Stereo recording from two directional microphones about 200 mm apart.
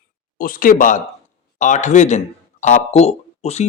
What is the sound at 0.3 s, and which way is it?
Speech, 45° left (ahead or behind).